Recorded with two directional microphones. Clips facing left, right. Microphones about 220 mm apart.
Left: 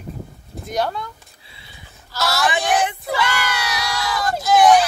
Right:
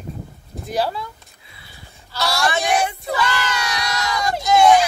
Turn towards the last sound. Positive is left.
turn(degrees=0)  # may be behind; listen again after turning